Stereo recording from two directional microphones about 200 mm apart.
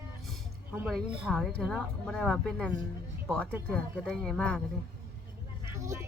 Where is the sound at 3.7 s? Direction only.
5° left (ahead or behind).